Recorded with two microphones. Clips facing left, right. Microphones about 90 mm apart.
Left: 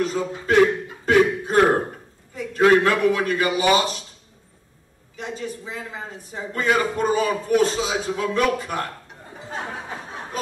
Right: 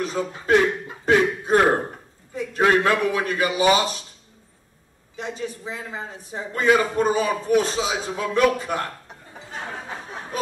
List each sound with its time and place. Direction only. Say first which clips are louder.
0.0 s a man's voice: left 2 dB; 20° right (ahead or behind)
1.0 s a sound: left 2 dB; 20° right (ahead or behind)
2.3 s a man's voice: left 3 dB; 20° right (ahead or behind)
5.1 s a man's voice: even; 20° right (ahead or behind)